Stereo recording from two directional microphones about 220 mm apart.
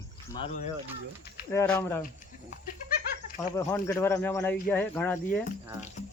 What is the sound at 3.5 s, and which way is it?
Speech, 15° left (ahead or behind).